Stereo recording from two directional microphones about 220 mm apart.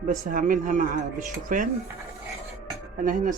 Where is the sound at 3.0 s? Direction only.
35° right (ahead or behind).